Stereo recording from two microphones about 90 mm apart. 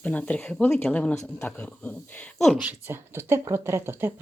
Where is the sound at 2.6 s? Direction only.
20° right (ahead or behind).